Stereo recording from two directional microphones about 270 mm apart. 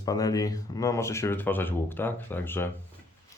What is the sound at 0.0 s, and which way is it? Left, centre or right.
Speech, centre.